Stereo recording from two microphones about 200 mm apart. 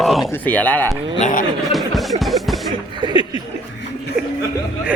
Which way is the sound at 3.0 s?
20° right (ahead or behind).